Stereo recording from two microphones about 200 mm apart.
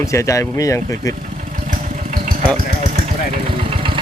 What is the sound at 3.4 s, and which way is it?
Vehicle, 25° right (ahead or behind).